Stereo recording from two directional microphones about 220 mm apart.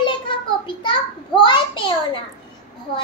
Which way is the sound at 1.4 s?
20° left (ahead or behind).